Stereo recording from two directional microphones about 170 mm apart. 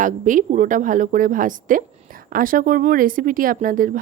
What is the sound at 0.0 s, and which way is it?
Speech, 50° right (ahead or behind).